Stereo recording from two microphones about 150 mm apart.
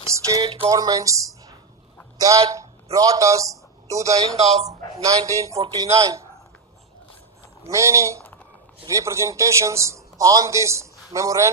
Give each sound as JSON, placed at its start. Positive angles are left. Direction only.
{"t": 0.1, "sound": "a man's voice", "side_deg": -25}
{"t": 7.6, "sound": "a man's voice", "side_deg": -20}